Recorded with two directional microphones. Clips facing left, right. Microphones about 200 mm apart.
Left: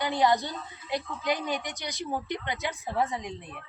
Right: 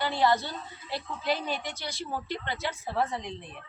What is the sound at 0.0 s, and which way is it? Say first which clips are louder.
A woman's voice: left 1 dB; 15° left (ahead or behind).